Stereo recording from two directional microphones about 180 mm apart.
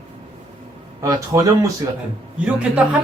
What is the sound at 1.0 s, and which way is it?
Speech, 20° right (ahead or behind).